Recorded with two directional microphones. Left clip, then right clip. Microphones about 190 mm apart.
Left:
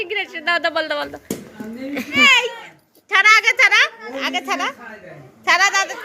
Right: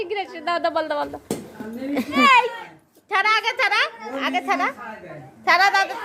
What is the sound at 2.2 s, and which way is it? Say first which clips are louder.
A woman's voice: left 1 dB; centre (ahead or behind).